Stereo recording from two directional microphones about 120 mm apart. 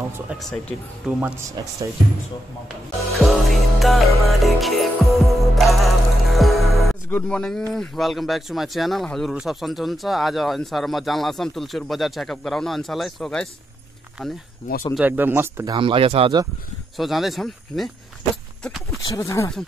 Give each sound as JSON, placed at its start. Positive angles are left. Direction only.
{"t": 0.4, "sound": "speech", "side_deg": 5}
{"t": 3.1, "sound": "music", "side_deg": 0}
{"t": 7.1, "sound": "speech", "side_deg": 10}
{"t": 14.6, "sound": "speech", "side_deg": 85}
{"t": 15.0, "sound": "speech", "side_deg": -15}
{"t": 15.6, "sound": "speech", "side_deg": -40}
{"t": 16.9, "sound": "speech", "side_deg": 0}
{"t": 18.3, "sound": "horse", "side_deg": 0}
{"t": 19.0, "sound": "speech", "side_deg": 25}